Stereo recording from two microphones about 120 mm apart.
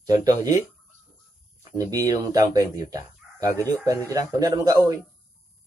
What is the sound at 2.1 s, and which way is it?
Speech, 30° right (ahead or behind).